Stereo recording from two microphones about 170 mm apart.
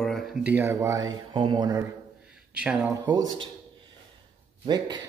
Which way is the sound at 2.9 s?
20° right (ahead or behind).